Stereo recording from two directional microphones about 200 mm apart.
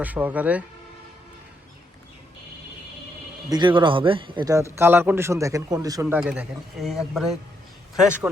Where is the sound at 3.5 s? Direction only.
20° right (ahead or behind).